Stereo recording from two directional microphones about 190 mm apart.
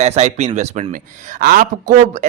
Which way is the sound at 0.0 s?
35° right (ahead or behind).